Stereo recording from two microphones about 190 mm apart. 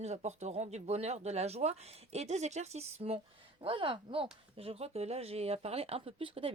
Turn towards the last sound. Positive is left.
turn(degrees=-30)  # may be behind; listen again after turning